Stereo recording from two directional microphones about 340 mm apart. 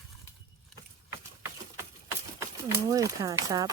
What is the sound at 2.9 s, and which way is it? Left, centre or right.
Speech, centre.